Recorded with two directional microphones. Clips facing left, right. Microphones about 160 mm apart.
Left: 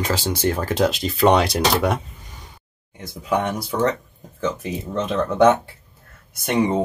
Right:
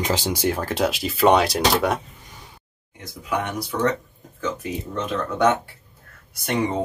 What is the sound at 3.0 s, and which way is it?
Speech, 30° left (ahead or behind).